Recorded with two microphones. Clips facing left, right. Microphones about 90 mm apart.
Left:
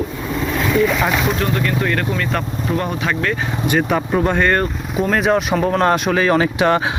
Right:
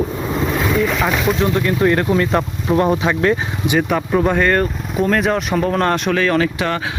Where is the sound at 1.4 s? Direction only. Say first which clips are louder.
Right 3 dB; 25° right (ahead or behind).